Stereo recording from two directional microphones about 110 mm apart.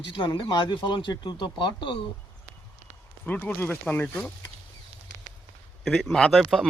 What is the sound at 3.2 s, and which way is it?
Speech, 15° left (ahead or behind).